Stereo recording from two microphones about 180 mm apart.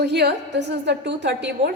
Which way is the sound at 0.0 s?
70° right (ahead or behind).